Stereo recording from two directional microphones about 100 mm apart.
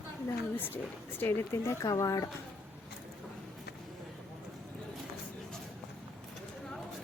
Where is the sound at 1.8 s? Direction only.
35° left (ahead or behind).